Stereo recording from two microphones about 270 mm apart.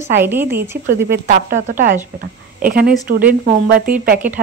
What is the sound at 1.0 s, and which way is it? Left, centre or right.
A woman's voice, right.